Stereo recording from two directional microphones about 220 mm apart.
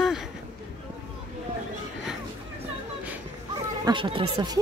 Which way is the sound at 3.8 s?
20° right (ahead or behind).